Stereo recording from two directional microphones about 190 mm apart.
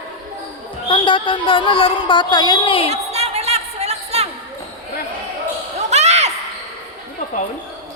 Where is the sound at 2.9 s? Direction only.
35° right (ahead or behind).